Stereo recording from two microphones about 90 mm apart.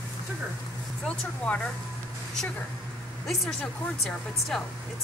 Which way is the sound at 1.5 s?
10° left (ahead or behind).